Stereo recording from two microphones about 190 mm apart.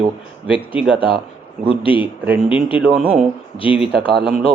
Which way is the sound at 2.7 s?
5° right (ahead or behind).